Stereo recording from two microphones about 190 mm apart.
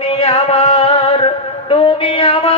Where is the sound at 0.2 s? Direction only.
30° left (ahead or behind).